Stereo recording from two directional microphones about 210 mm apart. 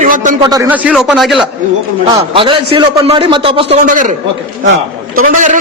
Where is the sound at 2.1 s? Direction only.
25° right (ahead or behind).